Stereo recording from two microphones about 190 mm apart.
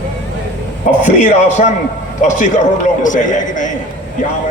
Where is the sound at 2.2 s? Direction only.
40° left (ahead or behind).